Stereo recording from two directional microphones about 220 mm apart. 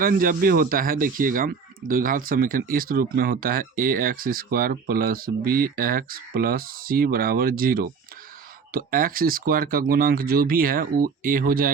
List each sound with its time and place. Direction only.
0.0 s speech: 40° right (ahead or behind)